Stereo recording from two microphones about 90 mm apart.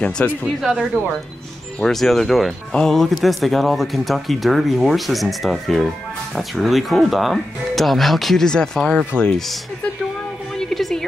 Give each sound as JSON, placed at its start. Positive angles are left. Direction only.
{"t": 0.2, "sound": "speech", "side_deg": 20}
{"t": 0.6, "sound": "speech", "side_deg": -5}
{"t": 1.8, "sound": "speech", "side_deg": 5}
{"t": 10.5, "sound": "a sound", "side_deg": 5}